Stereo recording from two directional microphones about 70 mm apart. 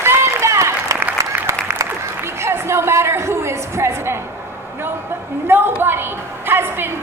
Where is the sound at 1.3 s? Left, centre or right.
Right.